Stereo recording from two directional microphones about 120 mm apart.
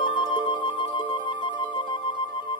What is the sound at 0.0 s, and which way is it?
Music, 40° left (ahead or behind).